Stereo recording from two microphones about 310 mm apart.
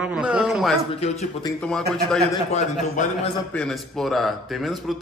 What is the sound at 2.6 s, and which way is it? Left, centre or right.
Speech, left.